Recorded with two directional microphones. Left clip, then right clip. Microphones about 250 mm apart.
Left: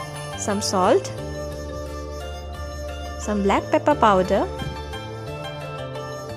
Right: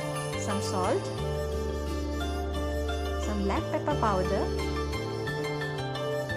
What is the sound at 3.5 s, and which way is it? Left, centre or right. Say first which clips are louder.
Speech: left 12 dB; left.